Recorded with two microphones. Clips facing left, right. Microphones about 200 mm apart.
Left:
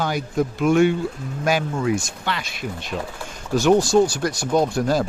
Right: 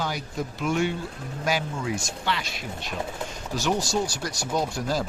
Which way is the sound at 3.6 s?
55° left (ahead or behind).